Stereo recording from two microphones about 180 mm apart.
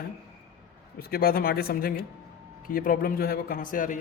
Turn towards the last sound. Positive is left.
turn(degrees=50)  # may be behind; listen again after turning